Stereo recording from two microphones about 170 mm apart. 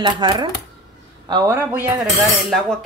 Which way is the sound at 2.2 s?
Centre (ahead or behind).